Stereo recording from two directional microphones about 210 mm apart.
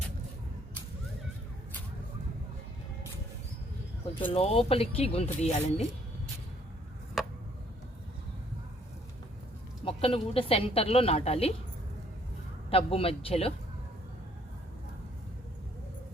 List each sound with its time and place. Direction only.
4.3 s a woman's voice: 25° left (ahead or behind)
7.2 s a sound: centre (ahead or behind)
9.8 s a woman's voice: 25° left (ahead or behind)
12.7 s a woman's voice: 25° left (ahead or behind)